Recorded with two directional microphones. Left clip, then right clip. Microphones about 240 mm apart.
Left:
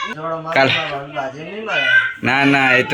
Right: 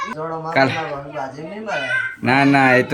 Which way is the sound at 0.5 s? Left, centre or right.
Centre.